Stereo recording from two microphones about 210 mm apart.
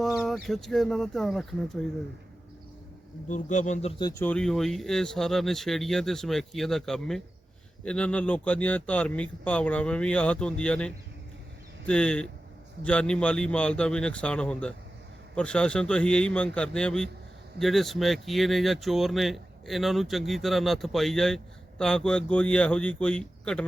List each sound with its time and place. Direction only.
0.0 s speech: centre (ahead or behind)
3.2 s speech: 35° left (ahead or behind)
4.2 s speech: 5° left (ahead or behind)